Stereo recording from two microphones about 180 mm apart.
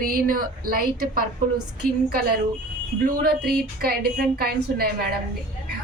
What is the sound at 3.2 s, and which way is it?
A woman's voice, 55° right (ahead or behind).